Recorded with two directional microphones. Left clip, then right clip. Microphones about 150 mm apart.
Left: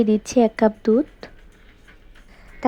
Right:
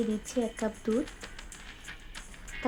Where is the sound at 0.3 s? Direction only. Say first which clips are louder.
Left 15 dB; 45° left (ahead or behind).